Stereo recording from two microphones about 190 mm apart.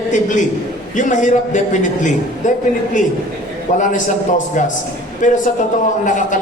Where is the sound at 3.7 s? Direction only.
40° left (ahead or behind).